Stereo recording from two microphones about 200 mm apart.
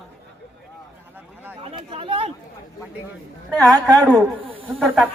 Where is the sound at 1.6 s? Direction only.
25° right (ahead or behind).